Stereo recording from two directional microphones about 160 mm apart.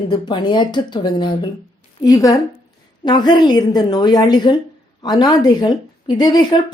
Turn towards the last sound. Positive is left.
turn(degrees=25)  # may be behind; listen again after turning